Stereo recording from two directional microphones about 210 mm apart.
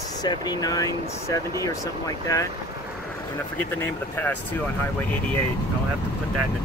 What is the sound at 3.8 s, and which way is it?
Speech, 10° left (ahead or behind).